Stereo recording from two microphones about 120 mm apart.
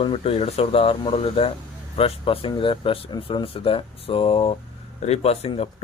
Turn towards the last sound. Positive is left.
turn(degrees=60)  # may be behind; listen again after turning